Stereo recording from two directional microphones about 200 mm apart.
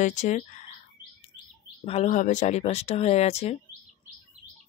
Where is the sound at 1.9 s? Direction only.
35° left (ahead or behind).